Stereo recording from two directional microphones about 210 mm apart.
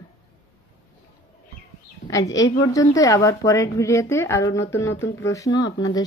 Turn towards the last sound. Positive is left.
turn(degrees=20)  # may be behind; listen again after turning